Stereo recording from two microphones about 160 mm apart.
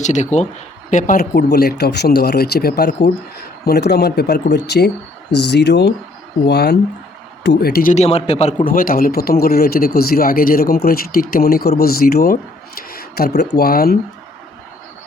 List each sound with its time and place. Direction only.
0.0 s speech: 50° left (ahead or behind); by 6.7 s 90° left
7.4 s speech: 75° left (ahead or behind)
7.9 s speech: 40° left (ahead or behind)
8.6 s speech: 60° left (ahead or behind)